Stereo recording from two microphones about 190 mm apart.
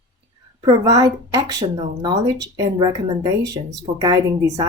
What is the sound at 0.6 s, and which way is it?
A woman's voice, 20° right (ahead or behind).